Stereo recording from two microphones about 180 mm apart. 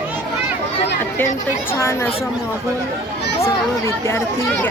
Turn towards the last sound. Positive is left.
turn(degrees=15)  # may be behind; listen again after turning